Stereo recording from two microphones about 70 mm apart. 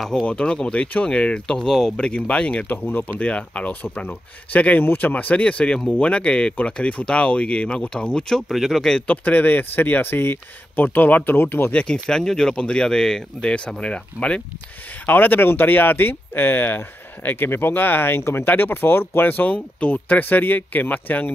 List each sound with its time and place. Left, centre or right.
0.2 s speech: centre
9.0 s speech: left
11.8 s speech: centre
15.0 s speech: left